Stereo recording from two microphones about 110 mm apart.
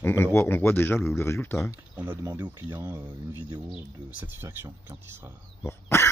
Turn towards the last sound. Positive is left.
turn(degrees=25)  # may be behind; listen again after turning